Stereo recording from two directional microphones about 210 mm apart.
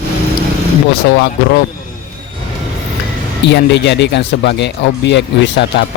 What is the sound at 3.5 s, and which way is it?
Speech, 55° left (ahead or behind).